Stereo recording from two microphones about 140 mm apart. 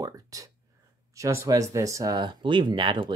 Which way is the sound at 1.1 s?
20° right (ahead or behind).